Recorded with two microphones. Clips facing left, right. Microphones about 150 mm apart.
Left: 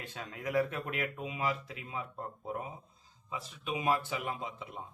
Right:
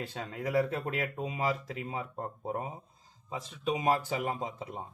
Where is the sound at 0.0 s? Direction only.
35° right (ahead or behind).